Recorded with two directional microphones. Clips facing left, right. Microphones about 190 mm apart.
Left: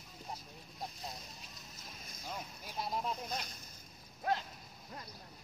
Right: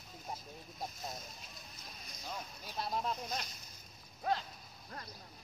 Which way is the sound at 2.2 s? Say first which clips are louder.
Even; 10° left (ahead or behind).